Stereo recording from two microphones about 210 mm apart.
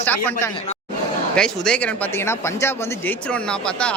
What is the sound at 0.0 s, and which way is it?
Speech, 10° left (ahead or behind).